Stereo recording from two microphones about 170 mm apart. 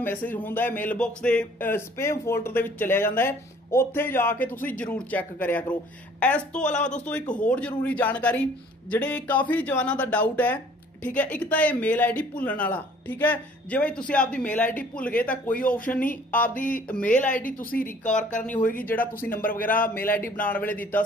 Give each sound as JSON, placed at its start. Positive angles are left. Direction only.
{"t": 0.0, "sound": "speech", "side_deg": 10}
{"t": 15.6, "sound": "a woman's voice", "side_deg": 55}
{"t": 16.3, "sound": "speech", "side_deg": 10}
{"t": 16.6, "sound": "a sound", "side_deg": 55}
{"t": 17.0, "sound": "speech", "side_deg": 10}
{"t": 17.4, "sound": "a sound", "side_deg": 55}
{"t": 18.4, "sound": "speech", "side_deg": 10}